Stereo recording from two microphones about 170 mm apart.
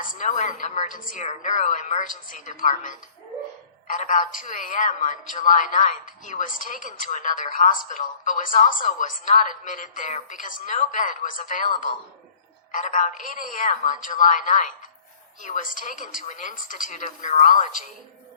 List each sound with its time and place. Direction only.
0.0 s a woman's voice: 50° left (ahead or behind)
12.7 s a woman's voice: 50° left (ahead or behind)